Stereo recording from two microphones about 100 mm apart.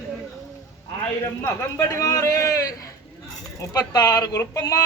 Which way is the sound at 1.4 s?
35° left (ahead or behind).